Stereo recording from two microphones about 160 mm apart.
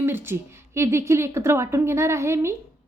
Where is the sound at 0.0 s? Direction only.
15° right (ahead or behind).